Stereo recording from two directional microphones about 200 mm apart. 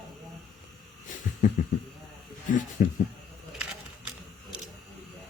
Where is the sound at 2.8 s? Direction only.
40° left (ahead or behind).